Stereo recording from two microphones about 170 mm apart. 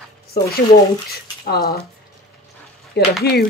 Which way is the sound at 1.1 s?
65° left (ahead or behind).